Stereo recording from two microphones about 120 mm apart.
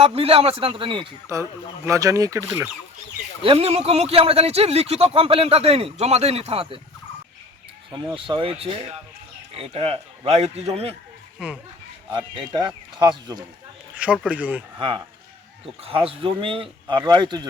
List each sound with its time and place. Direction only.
0.0 s speech: 55° right (ahead or behind)
1.3 s speech: 25° right (ahead or behind)
3.4 s a man's voice: 50° right (ahead or behind)
7.9 s a man's voice: 40° right (ahead or behind); by 10.9 s 60° right (ahead or behind)
11.3 s speech: 5° right (ahead or behind)
12.1 s a man's voice: 40° right (ahead or behind)
13.9 s speech: 10° right (ahead or behind)
14.8 s speech: 45° right (ahead or behind)